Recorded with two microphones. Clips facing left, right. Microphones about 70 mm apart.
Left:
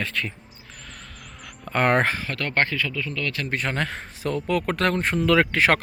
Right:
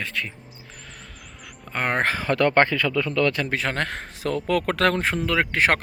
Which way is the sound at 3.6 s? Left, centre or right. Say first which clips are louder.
Right 1 dB; right.